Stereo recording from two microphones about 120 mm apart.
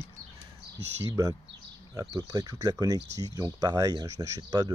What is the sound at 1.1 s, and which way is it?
Speech, 30° right (ahead or behind).